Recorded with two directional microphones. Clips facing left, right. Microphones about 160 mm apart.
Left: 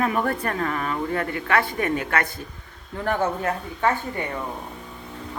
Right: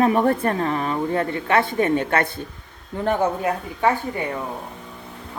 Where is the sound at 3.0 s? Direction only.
15° right (ahead or behind).